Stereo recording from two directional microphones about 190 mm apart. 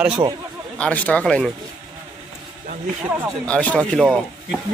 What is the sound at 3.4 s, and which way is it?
Speech, 5° left (ahead or behind).